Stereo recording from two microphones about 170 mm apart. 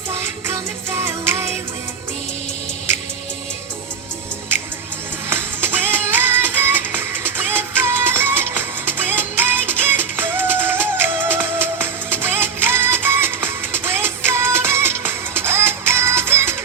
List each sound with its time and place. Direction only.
0.1 s music: 15° right (ahead or behind)
5.3 s music: 10° right (ahead or behind)